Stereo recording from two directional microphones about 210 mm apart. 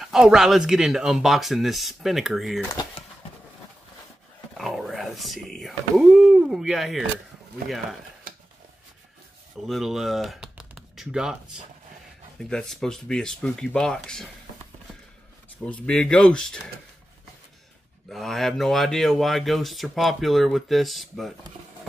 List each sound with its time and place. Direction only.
0.0 s speech: centre (ahead or behind)
2.7 s speech: 20° left (ahead or behind)
4.6 s a sound: centre (ahead or behind)
9.7 s speech: centre (ahead or behind)
15.6 s speech: 5° left (ahead or behind)
18.1 s speech: centre (ahead or behind)